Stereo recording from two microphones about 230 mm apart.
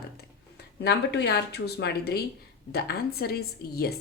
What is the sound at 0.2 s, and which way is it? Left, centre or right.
A woman's voice, left.